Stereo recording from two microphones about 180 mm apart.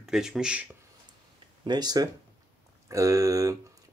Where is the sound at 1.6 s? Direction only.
25° right (ahead or behind).